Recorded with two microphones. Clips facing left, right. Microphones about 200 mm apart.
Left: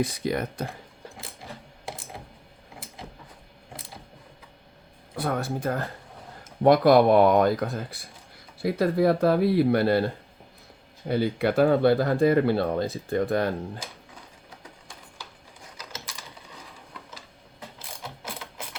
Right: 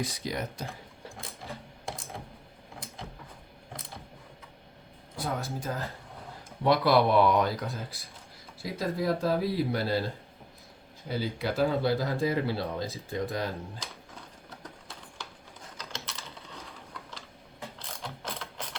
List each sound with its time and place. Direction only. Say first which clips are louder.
0.0 s speech: left 7 dB; 55° left (ahead or behind)
0.7 s sewing machine: left 2 dB; centre (ahead or behind)
3.7 s a sound: left 1 dB; 5° left (ahead or behind)
5.1 s speech: left 6 dB; 60° left (ahead or behind)
6.6 s speech: left 6 dB; 50° left (ahead or behind)
11.1 s speech: left 8 dB; 60° left (ahead or behind)
15.8 s typing: even; 5° left (ahead or behind)
16.2 s a sound: even; centre (ahead or behind)
17.7 s ratchet: even; 5° left (ahead or behind)